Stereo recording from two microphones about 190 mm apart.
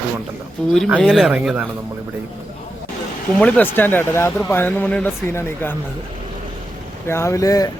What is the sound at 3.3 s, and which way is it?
Speech, 5° left (ahead or behind).